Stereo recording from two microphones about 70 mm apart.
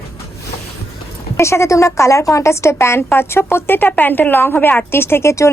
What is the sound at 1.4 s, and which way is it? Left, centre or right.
Speech, left.